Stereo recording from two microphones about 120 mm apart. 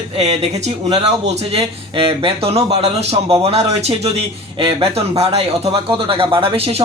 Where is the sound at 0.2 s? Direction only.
65° right (ahead or behind).